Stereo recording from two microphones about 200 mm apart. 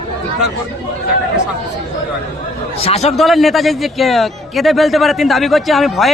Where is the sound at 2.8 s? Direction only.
30° left (ahead or behind).